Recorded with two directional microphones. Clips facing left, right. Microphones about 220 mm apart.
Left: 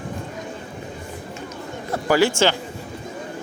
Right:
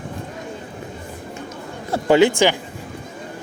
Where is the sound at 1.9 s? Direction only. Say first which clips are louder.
Right 4 dB; 20° right (ahead or behind).